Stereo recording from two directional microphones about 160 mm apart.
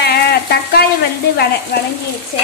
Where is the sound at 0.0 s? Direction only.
90° left.